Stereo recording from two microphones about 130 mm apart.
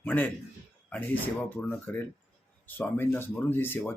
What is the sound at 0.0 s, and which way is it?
A man's voice, 10° left (ahead or behind).